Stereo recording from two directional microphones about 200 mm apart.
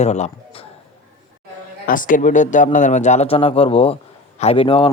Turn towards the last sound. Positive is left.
turn(degrees=25)  # may be behind; listen again after turning